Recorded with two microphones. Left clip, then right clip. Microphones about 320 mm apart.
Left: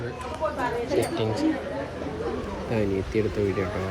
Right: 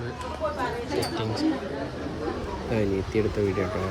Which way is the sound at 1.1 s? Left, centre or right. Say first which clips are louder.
Left 2 dB; centre.